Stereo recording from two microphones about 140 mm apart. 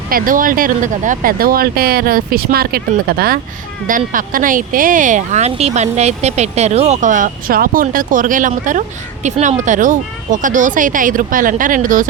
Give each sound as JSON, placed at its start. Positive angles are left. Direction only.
{"t": 0.1, "sound": "speech", "side_deg": -80}
{"t": 3.8, "sound": "speech", "side_deg": -75}